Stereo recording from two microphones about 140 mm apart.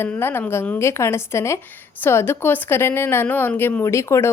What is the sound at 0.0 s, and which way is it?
A woman's voice, 15° left (ahead or behind).